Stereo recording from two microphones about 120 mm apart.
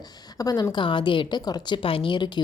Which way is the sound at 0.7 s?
45° left (ahead or behind).